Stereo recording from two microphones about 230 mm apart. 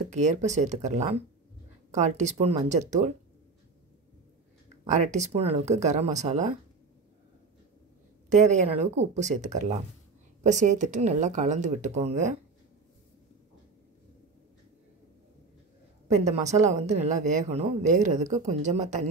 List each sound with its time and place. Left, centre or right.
0.1 s speech: right
4.8 s speech: right
8.3 s speech: right
16.1 s speech: right